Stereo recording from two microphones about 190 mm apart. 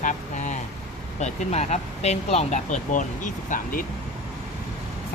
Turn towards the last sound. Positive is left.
turn(degrees=45)  # may be behind; listen again after turning